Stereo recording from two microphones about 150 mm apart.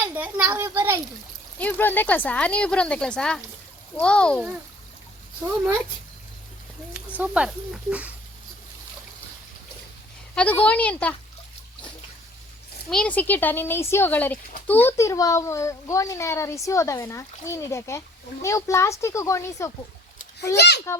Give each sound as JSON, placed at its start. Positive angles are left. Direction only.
{"t": 0.0, "sound": "a child's voice", "side_deg": -10}
{"t": 1.5, "sound": "speech", "side_deg": 10}
{"t": 7.2, "sound": "a child's voice", "side_deg": -5}
{"t": 10.3, "sound": "speech", "side_deg": 10}
{"t": 12.9, "sound": "a child's voice", "side_deg": 10}
{"t": 20.6, "sound": "a child's voice", "side_deg": 90}